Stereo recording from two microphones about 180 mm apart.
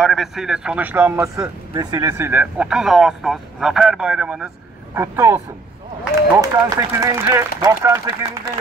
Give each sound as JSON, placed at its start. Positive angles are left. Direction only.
{"t": 0.0, "sound": "speech", "side_deg": 0}
{"t": 4.9, "sound": "speech", "side_deg": -15}